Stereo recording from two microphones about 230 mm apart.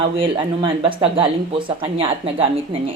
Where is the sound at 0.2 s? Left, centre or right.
Right.